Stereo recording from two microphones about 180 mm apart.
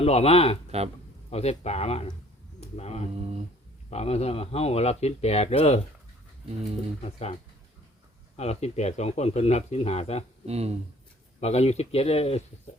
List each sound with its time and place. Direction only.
0.0 s speech: 35° left (ahead or behind)
7.0 s speech: 35° left (ahead or behind)
8.4 s speech: 35° left (ahead or behind)
10.4 s speech: 35° right (ahead or behind)
11.3 s speech: 35° left (ahead or behind)